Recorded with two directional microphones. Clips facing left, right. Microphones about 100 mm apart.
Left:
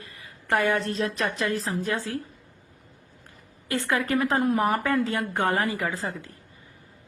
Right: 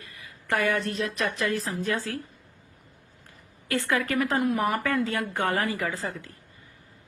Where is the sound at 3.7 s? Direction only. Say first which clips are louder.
Left 1 dB; 25° left (ahead or behind).